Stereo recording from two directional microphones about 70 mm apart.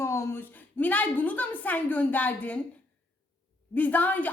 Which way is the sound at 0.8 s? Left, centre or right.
Left.